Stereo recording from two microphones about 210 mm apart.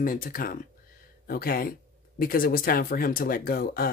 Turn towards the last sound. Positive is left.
turn(degrees=45)  # may be behind; listen again after turning